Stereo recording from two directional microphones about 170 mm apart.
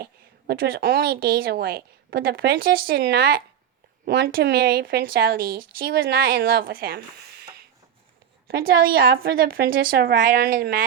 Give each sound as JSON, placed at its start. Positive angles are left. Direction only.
{"t": 0.0, "sound": "a woman's voice", "side_deg": -65}
{"t": 8.4, "sound": "a woman's voice", "side_deg": -65}